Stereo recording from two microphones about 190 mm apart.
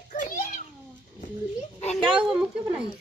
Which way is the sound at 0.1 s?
40° left (ahead or behind).